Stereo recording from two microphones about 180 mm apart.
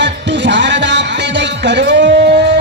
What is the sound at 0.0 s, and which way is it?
Music, 75° right (ahead or behind).